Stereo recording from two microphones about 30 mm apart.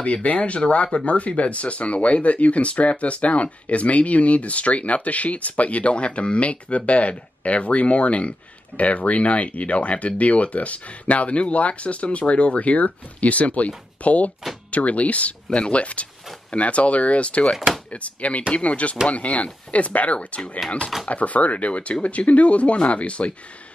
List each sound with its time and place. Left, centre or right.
0.0 s speech: left
20.2 s speech: left
21.1 s speech: left